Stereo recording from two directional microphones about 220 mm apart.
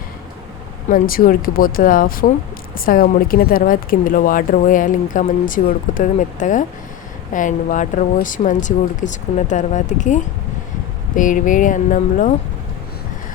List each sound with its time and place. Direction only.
0.9 s speech: 40° left (ahead or behind)